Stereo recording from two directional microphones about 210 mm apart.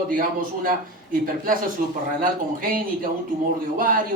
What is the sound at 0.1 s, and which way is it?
A man's voice, 40° right (ahead or behind).